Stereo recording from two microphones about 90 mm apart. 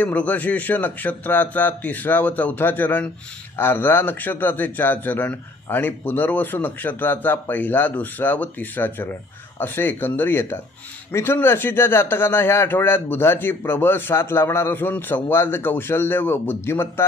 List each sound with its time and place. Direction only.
0.0 s speech: 15° left (ahead or behind)